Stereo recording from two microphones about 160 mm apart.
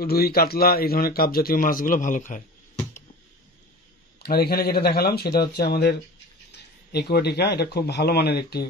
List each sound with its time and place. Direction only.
0.0 s a man's voice: 70° left (ahead or behind); by 2.4 s 55° left (ahead or behind)
4.2 s a man's voice: 75° left (ahead or behind)
6.5 s speech: 90° left